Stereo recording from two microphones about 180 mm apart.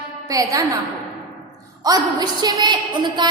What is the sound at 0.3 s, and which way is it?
Speech, 20° right (ahead or behind).